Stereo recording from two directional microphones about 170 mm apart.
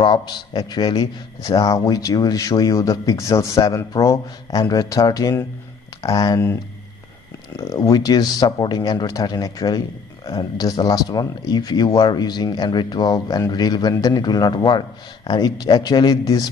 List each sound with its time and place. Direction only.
0.0 s speech: 25° left (ahead or behind)
7.5 s speech: 20° left (ahead or behind)